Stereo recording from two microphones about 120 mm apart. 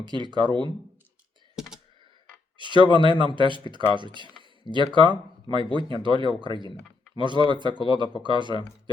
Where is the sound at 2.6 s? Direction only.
40° right (ahead or behind).